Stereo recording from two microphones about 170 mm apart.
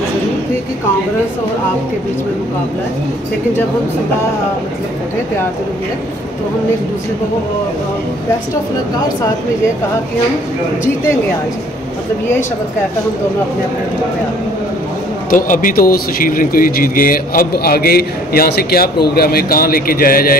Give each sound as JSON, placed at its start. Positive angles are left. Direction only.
{"t": 15.2, "sound": "a man's voice", "side_deg": 50}